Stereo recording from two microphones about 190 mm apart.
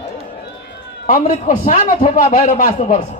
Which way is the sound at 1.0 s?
45° left (ahead or behind).